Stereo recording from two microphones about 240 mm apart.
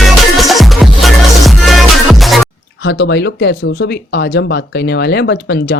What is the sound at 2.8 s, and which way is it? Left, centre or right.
Speech, left.